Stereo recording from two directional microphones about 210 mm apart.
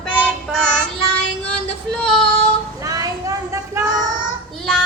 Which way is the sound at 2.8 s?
15° right (ahead or behind).